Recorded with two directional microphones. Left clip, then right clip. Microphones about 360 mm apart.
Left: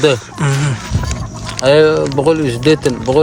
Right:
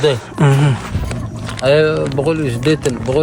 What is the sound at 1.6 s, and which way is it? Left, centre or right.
Speech, left.